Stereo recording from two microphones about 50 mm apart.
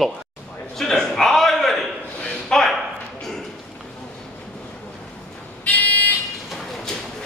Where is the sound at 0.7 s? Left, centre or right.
Centre.